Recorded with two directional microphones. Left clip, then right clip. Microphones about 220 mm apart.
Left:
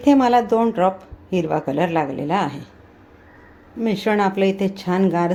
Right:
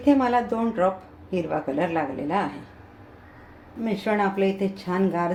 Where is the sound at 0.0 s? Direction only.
35° left (ahead or behind).